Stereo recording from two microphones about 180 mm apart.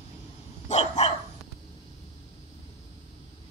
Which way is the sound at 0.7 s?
40° left (ahead or behind).